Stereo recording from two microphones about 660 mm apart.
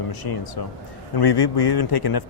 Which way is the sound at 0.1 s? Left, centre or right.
Left.